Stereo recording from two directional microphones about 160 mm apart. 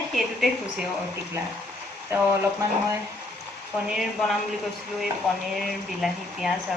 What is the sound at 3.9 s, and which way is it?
Speech, centre (ahead or behind).